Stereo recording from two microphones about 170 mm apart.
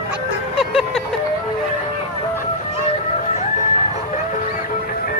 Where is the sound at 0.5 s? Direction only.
Centre (ahead or behind).